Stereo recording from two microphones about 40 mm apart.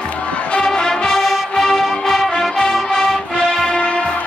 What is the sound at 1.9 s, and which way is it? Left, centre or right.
Music, centre.